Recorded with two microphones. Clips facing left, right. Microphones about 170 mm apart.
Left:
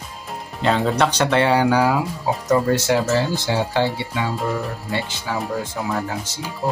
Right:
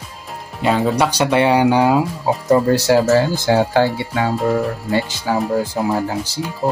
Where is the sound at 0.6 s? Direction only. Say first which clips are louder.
Right 2 dB; 5° right (ahead or behind).